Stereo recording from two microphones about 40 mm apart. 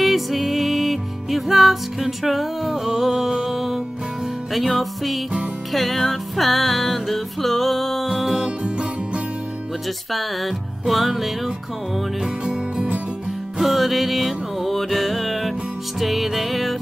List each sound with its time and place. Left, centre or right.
0.0 s music: centre
8.1 s music: centre
8.6 s music: right
10.1 s music: centre
12.4 s music: right
13.6 s music: centre